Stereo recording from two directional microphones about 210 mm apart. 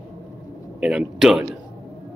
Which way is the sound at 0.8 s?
5° right (ahead or behind).